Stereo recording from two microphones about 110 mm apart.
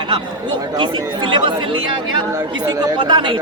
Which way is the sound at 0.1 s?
40° right (ahead or behind).